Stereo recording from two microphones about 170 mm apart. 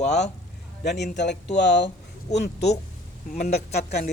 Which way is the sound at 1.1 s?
85° left.